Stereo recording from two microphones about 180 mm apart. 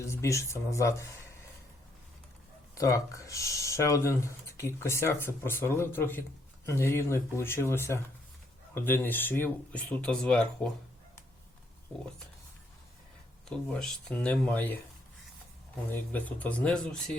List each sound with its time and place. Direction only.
0.0 s speech: 15° left (ahead or behind)
2.7 s speech: 15° left (ahead or behind)
13.5 s speech: 5° left (ahead or behind)
15.9 s speech: 10° left (ahead or behind)